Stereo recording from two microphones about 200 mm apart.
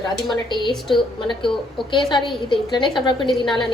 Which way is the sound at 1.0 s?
25° left (ahead or behind).